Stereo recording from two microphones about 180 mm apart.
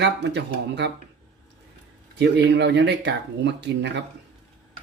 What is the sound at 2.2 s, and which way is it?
Speech, 70° right (ahead or behind).